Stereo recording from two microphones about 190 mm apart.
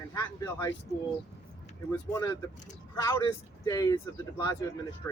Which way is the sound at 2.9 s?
15° left (ahead or behind).